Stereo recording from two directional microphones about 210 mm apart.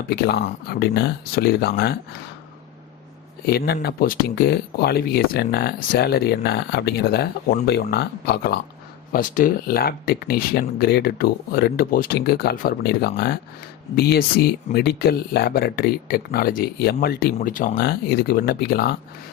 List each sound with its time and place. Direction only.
0.1 s speech: 50° left (ahead or behind)
3.4 s speech: 50° left (ahead or behind)